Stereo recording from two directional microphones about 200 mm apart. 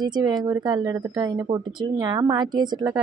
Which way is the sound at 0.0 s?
20° right (ahead or behind).